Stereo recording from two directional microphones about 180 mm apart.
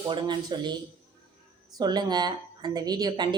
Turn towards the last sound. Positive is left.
turn(degrees=-25)  # may be behind; listen again after turning